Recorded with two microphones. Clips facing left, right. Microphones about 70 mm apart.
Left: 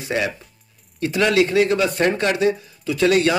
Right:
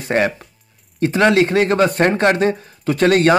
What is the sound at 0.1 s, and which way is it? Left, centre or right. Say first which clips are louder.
Speech: right 6 dB; right.